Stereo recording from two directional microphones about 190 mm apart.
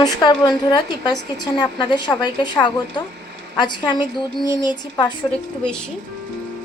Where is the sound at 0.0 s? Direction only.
25° left (ahead or behind).